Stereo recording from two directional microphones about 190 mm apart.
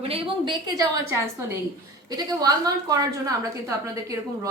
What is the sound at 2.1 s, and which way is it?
A woman's voice, 20° right (ahead or behind).